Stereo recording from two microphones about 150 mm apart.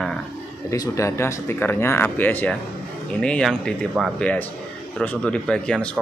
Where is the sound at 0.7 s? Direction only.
20° left (ahead or behind); by 6.0 s 5° left (ahead or behind).